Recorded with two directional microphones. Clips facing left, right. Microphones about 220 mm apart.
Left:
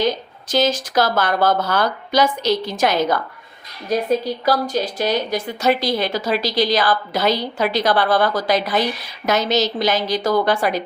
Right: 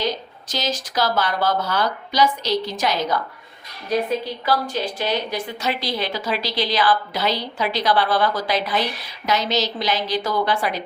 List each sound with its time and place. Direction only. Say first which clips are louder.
0.4 s a woman's voice: left 8 dB; 50° left (ahead or behind)
4.4 s a woman's voice: left 3 dB; 40° left (ahead or behind)